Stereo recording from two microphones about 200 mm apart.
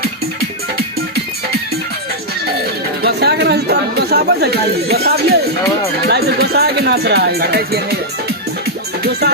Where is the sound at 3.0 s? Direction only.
55° right (ahead or behind).